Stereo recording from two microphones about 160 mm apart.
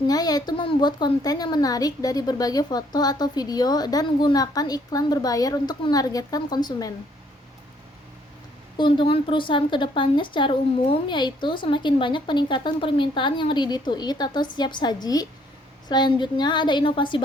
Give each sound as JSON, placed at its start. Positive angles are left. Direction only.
{"t": 0.1, "sound": "a woman's voice", "side_deg": 25}
{"t": 8.8, "sound": "a woman's voice", "side_deg": 30}